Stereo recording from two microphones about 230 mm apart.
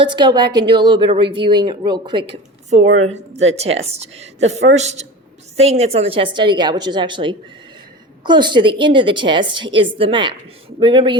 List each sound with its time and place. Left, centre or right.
0.0 s a woman's voice: centre
2.8 s a woman's voice: right
3.9 s a woman's voice: right